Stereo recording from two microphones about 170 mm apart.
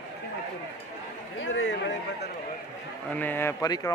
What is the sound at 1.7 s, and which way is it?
Speech, 90° left.